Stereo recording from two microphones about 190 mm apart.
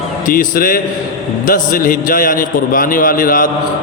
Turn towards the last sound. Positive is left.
turn(degrees=45)  # may be behind; listen again after turning